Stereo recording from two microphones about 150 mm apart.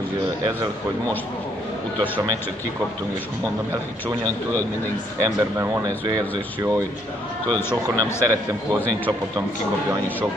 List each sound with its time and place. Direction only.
5.2 s a man's voice: 20° right (ahead or behind)